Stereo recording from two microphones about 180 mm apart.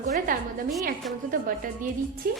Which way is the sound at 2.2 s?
55° right (ahead or behind).